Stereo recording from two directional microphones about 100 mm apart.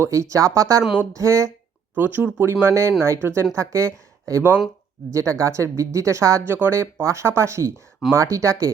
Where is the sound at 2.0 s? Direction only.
20° right (ahead or behind).